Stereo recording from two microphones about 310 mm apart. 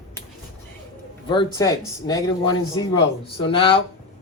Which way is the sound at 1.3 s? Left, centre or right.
Centre.